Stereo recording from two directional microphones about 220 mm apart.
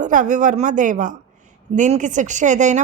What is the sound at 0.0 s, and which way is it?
Speech, 35° right (ahead or behind).